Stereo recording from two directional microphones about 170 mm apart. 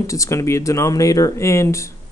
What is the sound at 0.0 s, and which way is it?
Speech, 20° left (ahead or behind).